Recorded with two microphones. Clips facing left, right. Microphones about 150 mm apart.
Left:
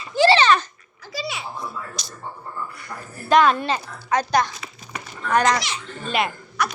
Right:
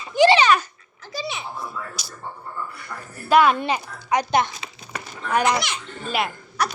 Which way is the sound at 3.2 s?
10° right (ahead or behind).